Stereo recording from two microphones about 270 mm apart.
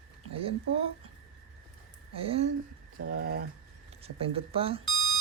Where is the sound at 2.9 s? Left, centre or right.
Right.